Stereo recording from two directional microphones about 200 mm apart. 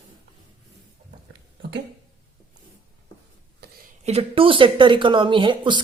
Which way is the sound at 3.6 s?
55° right (ahead or behind).